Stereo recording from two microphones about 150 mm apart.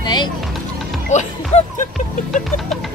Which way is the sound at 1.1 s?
50° left (ahead or behind).